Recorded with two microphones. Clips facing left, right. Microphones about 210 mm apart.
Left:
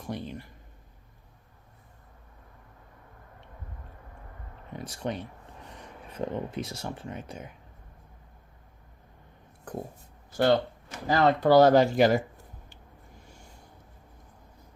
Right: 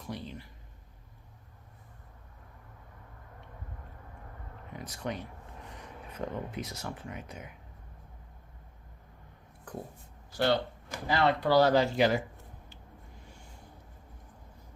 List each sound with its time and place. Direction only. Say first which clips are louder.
0.1 s a sound: left 4 dB; 50° left (ahead or behind)
4.7 s speech: left 4 dB; 30° left (ahead or behind)
10.3 s speech: left 5 dB; 45° left (ahead or behind)